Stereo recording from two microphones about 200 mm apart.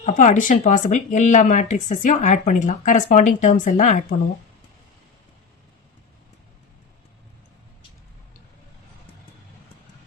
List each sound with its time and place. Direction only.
0.0 s speech: 40° left (ahead or behind)